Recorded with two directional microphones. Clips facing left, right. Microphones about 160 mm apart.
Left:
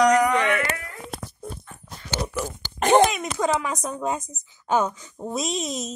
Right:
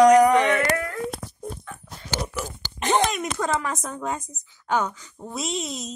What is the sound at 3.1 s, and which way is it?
A woman's voice, 5° left (ahead or behind).